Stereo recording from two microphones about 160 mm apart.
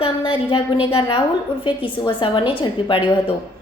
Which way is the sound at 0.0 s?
30° left (ahead or behind).